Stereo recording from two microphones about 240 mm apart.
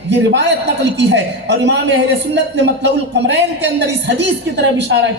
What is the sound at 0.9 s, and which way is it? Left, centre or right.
A man's voice, right.